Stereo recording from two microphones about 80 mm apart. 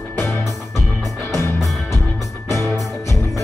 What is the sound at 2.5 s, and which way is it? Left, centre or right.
Music, right.